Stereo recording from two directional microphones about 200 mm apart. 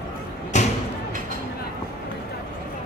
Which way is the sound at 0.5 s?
35° left (ahead or behind).